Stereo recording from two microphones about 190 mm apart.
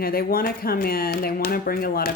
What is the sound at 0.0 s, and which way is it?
Speech, 50° left (ahead or behind).